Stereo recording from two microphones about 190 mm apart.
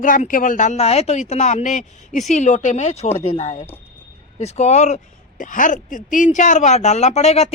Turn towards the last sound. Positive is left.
turn(degrees=35)  # may be behind; listen again after turning